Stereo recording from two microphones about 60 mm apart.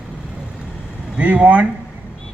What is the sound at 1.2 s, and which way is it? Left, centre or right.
Speech, centre.